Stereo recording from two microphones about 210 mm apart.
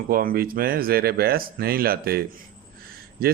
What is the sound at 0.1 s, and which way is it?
Speech, 45° right (ahead or behind).